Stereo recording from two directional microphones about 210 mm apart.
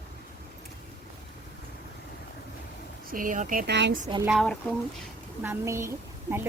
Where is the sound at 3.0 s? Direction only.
40° right (ahead or behind).